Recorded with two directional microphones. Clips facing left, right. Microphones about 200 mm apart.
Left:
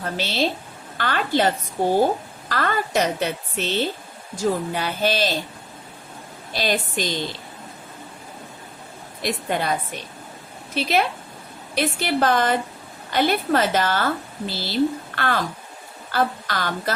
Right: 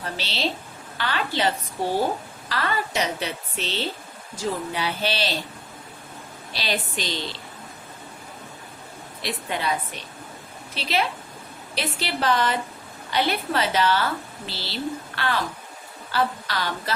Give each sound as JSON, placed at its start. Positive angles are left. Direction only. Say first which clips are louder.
{"t": 0.0, "sound": "speech", "louder": "left 5 dB", "side_deg": 50}
{"t": 6.5, "sound": "speech", "louder": "left 5 dB", "side_deg": 50}
{"t": 9.2, "sound": "speech", "louder": "left 4 dB", "side_deg": 50}
{"t": 10.8, "sound": "speech", "louder": "left 4 dB", "side_deg": 50}